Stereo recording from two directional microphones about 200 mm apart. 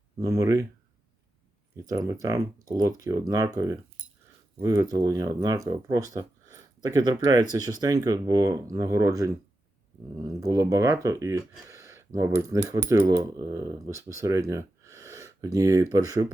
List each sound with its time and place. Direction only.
0.2 s speech: 15° right (ahead or behind)
1.7 s speech: 15° right (ahead or behind)